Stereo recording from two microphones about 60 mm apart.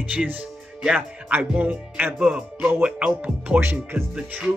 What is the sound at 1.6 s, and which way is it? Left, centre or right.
Music, right.